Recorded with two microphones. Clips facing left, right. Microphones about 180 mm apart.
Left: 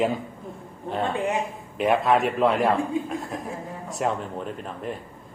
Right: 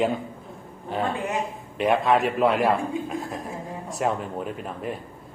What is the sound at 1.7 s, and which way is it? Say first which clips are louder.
A man's voice: even; centre (ahead or behind).